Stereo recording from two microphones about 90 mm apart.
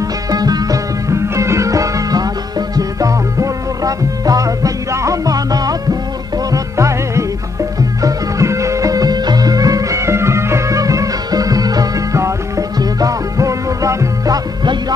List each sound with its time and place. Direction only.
0.3 s music: 45° right (ahead or behind)